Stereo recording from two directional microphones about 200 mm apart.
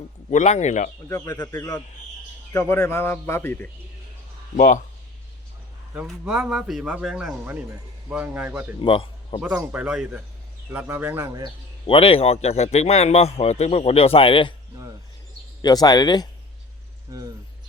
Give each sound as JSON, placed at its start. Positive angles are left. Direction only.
{"t": 0.3, "sound": "speech", "side_deg": 35}
{"t": 1.0, "sound": "a man's voice", "side_deg": 15}
{"t": 4.5, "sound": "speech", "side_deg": 45}
{"t": 5.9, "sound": "a man's voice", "side_deg": -5}
{"t": 8.8, "sound": "speech", "side_deg": 25}
{"t": 9.4, "sound": "a man's voice", "side_deg": -5}
{"t": 11.9, "sound": "speech", "side_deg": 30}
{"t": 15.6, "sound": "speech", "side_deg": 20}
{"t": 17.1, "sound": "speech", "side_deg": -20}